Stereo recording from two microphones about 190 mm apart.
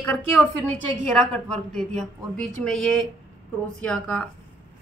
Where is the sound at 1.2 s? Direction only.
Centre (ahead or behind).